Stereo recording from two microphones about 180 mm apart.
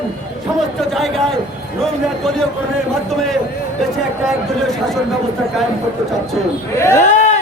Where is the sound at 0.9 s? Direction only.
Centre (ahead or behind).